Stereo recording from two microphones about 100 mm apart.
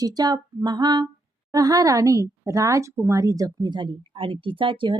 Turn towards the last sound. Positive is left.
turn(degrees=-55)  # may be behind; listen again after turning